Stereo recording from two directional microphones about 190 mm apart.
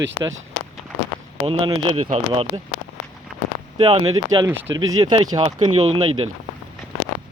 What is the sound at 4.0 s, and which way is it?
Speech, 90° right.